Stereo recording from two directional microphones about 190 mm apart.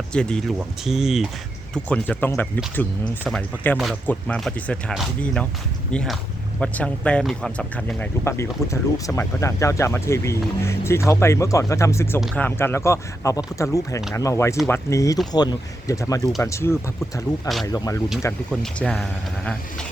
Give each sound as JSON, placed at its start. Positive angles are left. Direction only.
{"t": 0.1, "sound": "speech", "side_deg": 5}
{"t": 18.6, "sound": "speech", "side_deg": 5}